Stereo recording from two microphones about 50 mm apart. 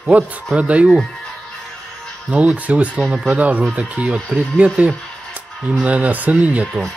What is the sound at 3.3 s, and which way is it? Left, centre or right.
Speech, right.